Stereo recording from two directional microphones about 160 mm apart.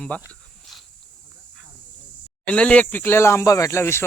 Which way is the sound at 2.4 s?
10° left (ahead or behind).